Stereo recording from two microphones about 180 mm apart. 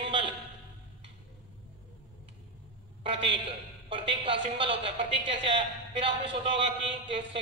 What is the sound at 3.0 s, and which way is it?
A man's voice, 30° right (ahead or behind).